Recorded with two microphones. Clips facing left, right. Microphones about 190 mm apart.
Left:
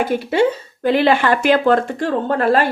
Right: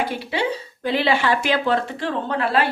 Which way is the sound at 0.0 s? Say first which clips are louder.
Left 8 dB; 50° left (ahead or behind).